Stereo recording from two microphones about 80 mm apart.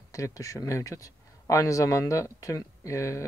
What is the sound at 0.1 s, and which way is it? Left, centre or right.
Speech, left.